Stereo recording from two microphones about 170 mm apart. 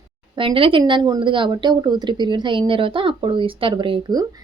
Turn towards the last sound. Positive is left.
turn(degrees=-25)  # may be behind; listen again after turning